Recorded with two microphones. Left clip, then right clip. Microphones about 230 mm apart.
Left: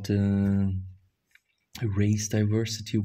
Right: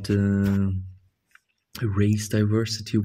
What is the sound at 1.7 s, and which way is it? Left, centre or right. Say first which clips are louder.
Speech: right 4 dB; centre.